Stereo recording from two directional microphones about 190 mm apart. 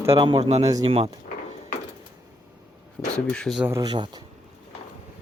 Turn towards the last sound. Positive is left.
turn(degrees=-20)  # may be behind; listen again after turning